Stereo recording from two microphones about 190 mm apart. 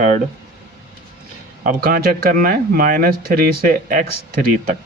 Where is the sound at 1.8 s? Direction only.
50° right (ahead or behind).